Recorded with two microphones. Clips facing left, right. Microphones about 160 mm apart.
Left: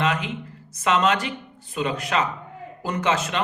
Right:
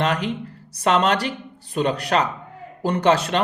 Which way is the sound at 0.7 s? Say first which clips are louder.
Right 2 dB; 35° right (ahead or behind).